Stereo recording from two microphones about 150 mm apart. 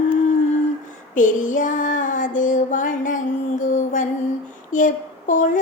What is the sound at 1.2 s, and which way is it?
Child singing, 60° left (ahead or behind).